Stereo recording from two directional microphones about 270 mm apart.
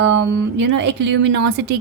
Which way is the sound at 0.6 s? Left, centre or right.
Right.